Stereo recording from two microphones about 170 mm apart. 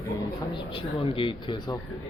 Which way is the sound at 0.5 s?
30° left (ahead or behind).